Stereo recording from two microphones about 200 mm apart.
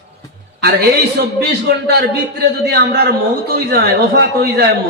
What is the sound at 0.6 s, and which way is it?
Speech, 55° right (ahead or behind).